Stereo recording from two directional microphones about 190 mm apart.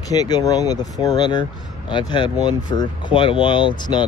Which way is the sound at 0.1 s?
20° left (ahead or behind).